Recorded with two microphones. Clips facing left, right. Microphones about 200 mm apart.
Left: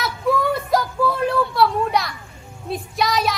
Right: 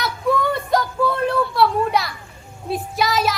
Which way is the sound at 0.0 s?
Centre (ahead or behind).